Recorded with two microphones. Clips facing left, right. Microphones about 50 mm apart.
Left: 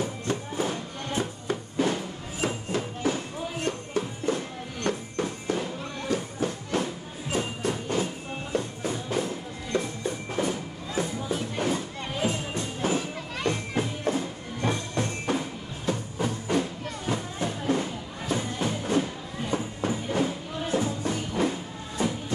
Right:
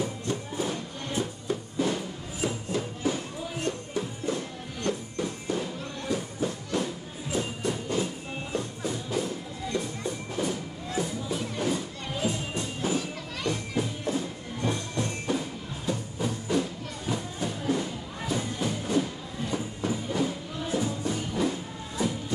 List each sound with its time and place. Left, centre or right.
0.3 s music: left
4.9 s a sound: left
5.2 s music: left